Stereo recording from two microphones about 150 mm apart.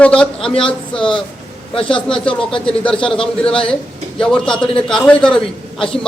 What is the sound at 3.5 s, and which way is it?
A man's voice, 5° left (ahead or behind).